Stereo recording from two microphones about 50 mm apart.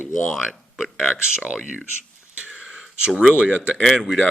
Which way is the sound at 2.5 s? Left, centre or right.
Centre.